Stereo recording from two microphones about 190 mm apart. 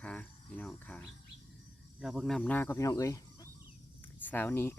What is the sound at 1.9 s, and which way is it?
Speech, 5° right (ahead or behind).